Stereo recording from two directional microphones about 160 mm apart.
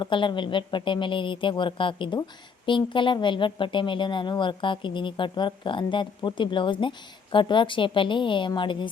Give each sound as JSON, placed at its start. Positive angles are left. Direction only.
{"t": 0.0, "sound": "a woman's voice", "side_deg": 30}